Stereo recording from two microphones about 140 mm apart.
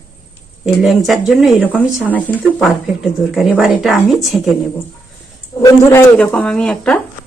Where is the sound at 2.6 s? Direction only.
Centre (ahead or behind).